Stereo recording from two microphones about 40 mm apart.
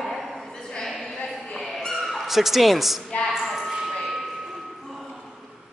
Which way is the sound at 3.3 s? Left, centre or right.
Centre.